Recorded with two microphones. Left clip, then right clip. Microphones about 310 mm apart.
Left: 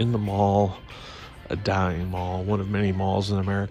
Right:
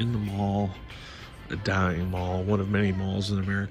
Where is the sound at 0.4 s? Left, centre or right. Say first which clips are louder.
Left 9 dB; right.